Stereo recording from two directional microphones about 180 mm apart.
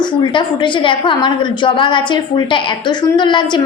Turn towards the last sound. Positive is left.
turn(degrees=25)  # may be behind; listen again after turning